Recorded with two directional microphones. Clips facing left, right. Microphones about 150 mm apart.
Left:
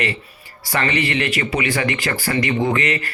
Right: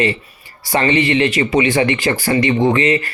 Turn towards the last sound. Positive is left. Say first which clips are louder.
# right 6 dB
turn(degrees=-25)  # may be behind; listen again after turning